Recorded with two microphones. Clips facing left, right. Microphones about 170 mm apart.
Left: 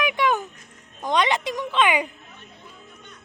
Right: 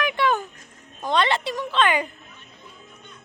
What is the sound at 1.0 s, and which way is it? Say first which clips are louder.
A woman's voice: even; 15° left (ahead or behind).